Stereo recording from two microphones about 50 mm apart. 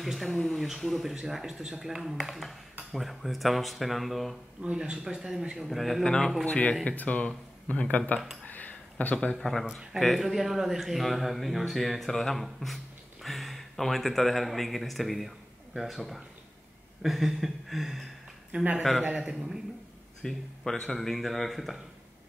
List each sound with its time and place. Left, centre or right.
0.0 s speech: centre
4.6 s a man's voice: centre
5.7 s speech: centre
6.0 s speech: centre
6.4 s speech: left
8.5 s a sound: left
9.1 s speech: left
9.4 s speech: centre
18.5 s speech: right
18.8 s speech: centre
19.1 s a man's voice: centre
20.2 s speech: centre